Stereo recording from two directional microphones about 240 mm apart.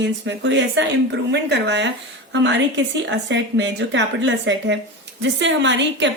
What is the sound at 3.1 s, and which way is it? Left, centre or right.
A woman's voice, right.